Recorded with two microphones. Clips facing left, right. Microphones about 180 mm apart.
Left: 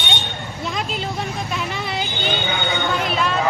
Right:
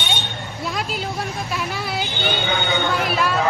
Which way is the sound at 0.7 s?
5° right (ahead or behind).